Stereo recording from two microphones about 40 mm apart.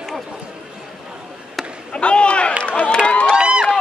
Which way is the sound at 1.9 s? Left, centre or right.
Left.